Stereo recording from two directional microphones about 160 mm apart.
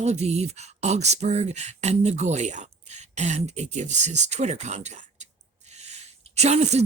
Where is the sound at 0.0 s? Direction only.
45° right (ahead or behind).